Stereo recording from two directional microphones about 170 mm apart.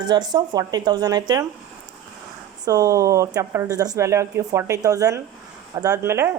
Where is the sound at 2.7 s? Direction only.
20° right (ahead or behind).